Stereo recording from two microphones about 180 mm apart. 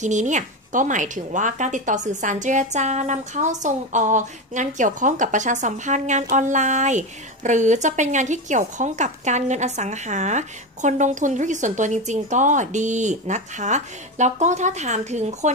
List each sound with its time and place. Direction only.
0.0 s a woman's voice: 40° right (ahead or behind)